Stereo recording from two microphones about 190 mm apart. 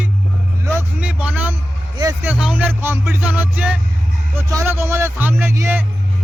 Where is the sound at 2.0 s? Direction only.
15° right (ahead or behind).